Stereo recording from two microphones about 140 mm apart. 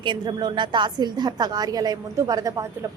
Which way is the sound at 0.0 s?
35° right (ahead or behind).